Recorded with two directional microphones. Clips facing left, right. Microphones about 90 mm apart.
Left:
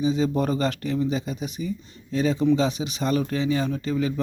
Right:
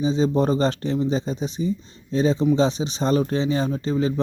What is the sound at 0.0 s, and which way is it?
A man's voice, 25° right (ahead or behind).